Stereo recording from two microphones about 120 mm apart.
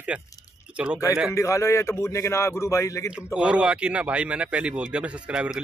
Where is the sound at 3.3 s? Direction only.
10° right (ahead or behind).